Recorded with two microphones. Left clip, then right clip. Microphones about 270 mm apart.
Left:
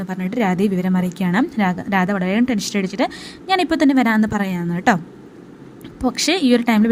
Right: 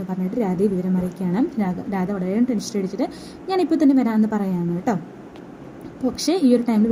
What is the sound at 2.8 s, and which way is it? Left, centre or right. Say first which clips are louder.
A woman's voice: left 5 dB; left.